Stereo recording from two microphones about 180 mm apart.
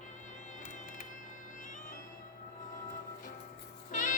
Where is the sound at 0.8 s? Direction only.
45° left (ahead or behind).